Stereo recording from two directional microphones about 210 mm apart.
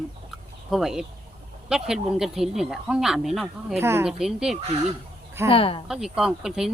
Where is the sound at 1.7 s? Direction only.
Centre (ahead or behind).